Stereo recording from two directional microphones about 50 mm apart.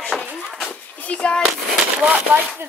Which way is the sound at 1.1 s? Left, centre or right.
Left.